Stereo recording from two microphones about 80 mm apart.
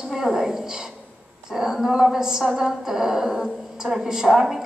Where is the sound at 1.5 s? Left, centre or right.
Centre.